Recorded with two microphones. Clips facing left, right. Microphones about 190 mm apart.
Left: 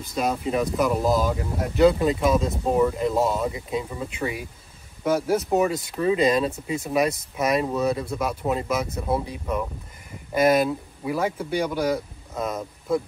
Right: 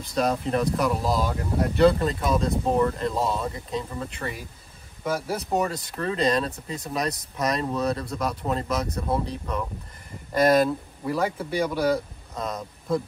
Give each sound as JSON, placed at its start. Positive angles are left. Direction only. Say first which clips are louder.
{"t": 0.1, "sound": "speech", "louder": "even", "side_deg": 5}
{"t": 5.5, "sound": "speech", "louder": "left 4 dB", "side_deg": 5}